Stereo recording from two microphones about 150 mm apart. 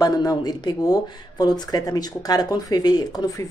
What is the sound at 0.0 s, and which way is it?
Speech, 25° left (ahead or behind).